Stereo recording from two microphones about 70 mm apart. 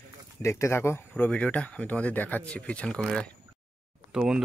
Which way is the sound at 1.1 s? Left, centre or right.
Centre.